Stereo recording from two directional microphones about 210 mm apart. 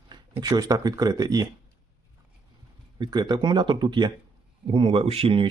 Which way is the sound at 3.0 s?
20° right (ahead or behind).